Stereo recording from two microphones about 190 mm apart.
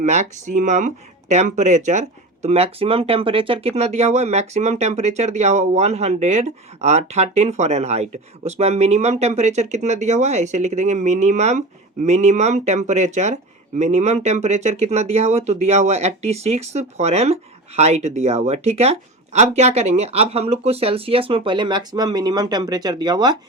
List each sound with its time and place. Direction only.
0.0 s speech: 40° right (ahead or behind); by 23.4 s 20° right (ahead or behind)